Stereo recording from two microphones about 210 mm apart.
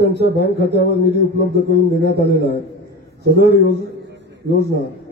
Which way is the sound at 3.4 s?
50° left (ahead or behind).